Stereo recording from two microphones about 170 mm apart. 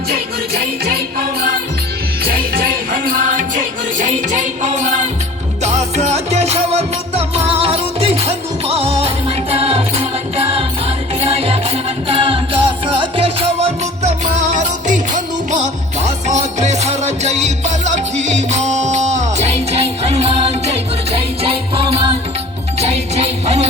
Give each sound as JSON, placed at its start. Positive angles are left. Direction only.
{"t": 0.1, "sound": "music", "side_deg": -65}
{"t": 2.2, "sound": "music", "side_deg": -60}
{"t": 14.3, "sound": "music", "side_deg": -45}